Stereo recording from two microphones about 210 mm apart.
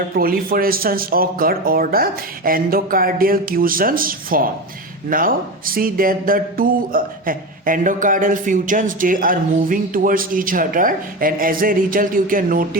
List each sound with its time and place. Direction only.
0.1 s speech: 45° right (ahead or behind)